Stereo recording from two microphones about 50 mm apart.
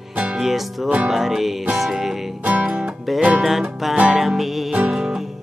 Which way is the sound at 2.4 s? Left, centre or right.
Right.